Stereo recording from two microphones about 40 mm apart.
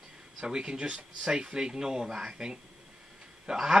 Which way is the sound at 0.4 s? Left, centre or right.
Centre.